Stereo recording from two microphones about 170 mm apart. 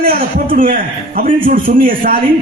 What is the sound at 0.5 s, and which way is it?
A man's voice, 55° right (ahead or behind).